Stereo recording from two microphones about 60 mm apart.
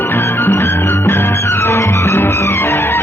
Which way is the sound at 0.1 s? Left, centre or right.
Left.